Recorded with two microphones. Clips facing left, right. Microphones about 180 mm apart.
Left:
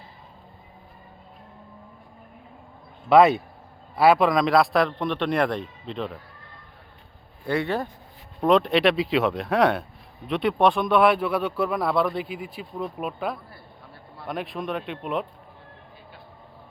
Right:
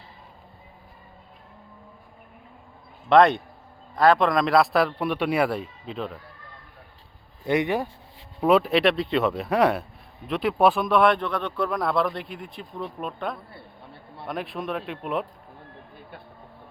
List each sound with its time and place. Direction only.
3.1 s speech: 5° left (ahead or behind)
7.4 s speech: 20° right (ahead or behind)
8.4 s speech: 5° right (ahead or behind)